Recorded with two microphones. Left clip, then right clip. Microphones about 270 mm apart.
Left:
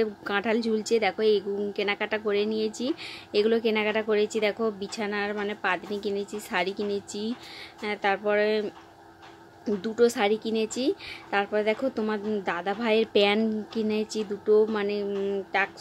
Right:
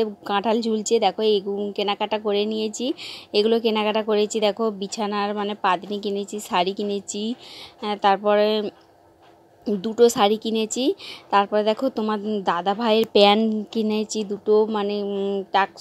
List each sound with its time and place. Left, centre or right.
0.0 s a woman's voice: centre